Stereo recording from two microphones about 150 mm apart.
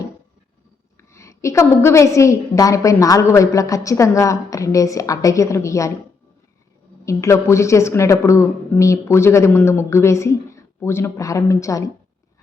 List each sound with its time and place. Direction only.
1.1 s a woman's voice: 20° left (ahead or behind)
7.0 s a woman's voice: 20° left (ahead or behind)